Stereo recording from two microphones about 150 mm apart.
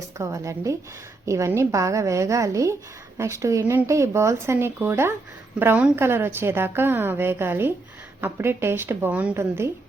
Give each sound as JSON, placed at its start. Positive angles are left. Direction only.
{"t": 0.2, "sound": "a woman's voice", "side_deg": -20}